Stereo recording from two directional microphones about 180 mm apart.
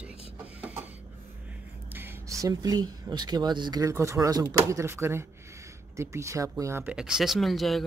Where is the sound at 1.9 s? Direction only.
15° right (ahead or behind).